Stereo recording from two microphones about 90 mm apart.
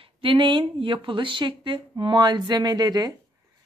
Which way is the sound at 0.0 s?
75° right (ahead or behind).